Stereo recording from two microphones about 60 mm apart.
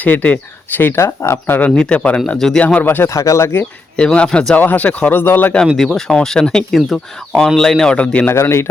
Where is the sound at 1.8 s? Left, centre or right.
Centre.